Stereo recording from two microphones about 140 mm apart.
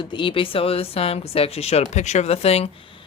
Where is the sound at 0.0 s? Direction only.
35° left (ahead or behind).